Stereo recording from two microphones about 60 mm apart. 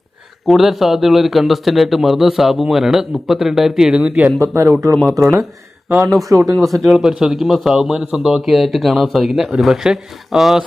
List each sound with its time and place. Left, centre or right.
0.4 s speech: centre
4.4 s speech: right
6.6 s speech: centre
6.9 s speech: centre